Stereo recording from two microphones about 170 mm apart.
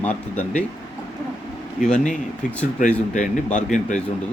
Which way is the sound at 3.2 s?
45° left (ahead or behind).